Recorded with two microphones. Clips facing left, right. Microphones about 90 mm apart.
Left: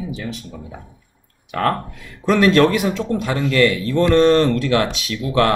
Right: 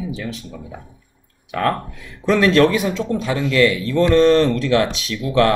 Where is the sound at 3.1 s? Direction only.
45° left (ahead or behind).